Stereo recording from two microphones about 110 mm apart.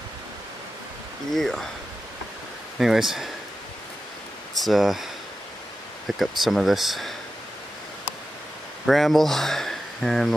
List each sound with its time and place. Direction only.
1.3 s speech: 5° left (ahead or behind)
2.8 s speech: 5° right (ahead or behind)
4.6 s speech: centre (ahead or behind)
6.1 s speech: centre (ahead or behind)
8.8 s speech: centre (ahead or behind)